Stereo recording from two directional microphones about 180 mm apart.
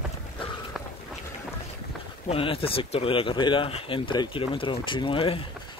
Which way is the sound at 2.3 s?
30° left (ahead or behind).